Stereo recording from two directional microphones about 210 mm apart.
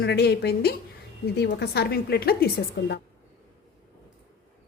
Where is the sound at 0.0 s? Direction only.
50° left (ahead or behind).